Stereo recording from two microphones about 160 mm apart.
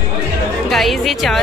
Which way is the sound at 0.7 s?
Centre (ahead or behind).